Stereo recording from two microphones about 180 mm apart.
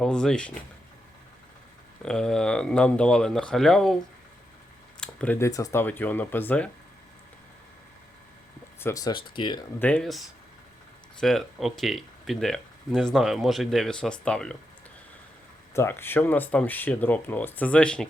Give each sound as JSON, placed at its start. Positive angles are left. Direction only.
{"t": 0.0, "sound": "speech", "side_deg": 5}
{"t": 2.0, "sound": "speech", "side_deg": 5}
{"t": 4.9, "sound": "speech", "side_deg": 10}
{"t": 8.8, "sound": "speech", "side_deg": 20}
{"t": 9.8, "sound": "speech", "side_deg": 5}
{"t": 15.7, "sound": "speech", "side_deg": 15}